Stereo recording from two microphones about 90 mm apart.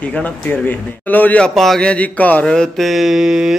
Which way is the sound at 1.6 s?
5° left (ahead or behind).